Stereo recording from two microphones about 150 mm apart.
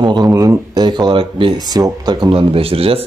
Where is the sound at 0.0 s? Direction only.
30° right (ahead or behind).